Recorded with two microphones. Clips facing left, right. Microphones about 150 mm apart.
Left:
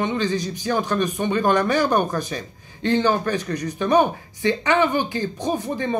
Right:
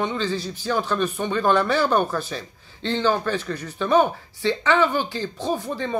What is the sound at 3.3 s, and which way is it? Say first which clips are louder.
Speech: left 3 dB; 15° left (ahead or behind).